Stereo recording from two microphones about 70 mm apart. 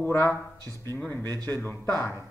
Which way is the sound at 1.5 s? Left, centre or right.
Left.